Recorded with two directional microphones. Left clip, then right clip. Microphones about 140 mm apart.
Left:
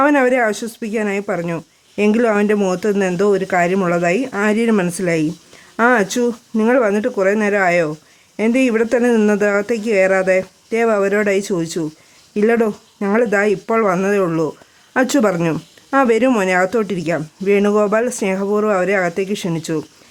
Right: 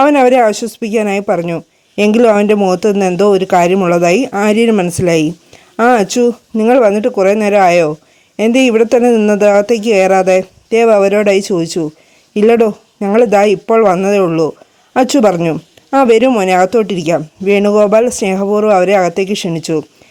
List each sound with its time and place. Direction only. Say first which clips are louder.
0.0 s a woman's voice: right 6 dB; 30° right (ahead or behind)